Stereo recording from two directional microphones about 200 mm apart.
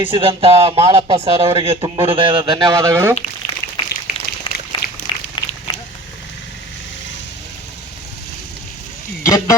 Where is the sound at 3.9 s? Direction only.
55° left (ahead or behind).